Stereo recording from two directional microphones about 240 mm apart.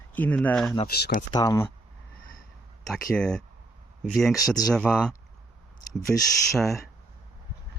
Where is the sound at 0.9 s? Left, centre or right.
Left.